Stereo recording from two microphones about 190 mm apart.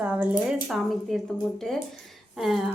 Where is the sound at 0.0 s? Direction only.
5° right (ahead or behind).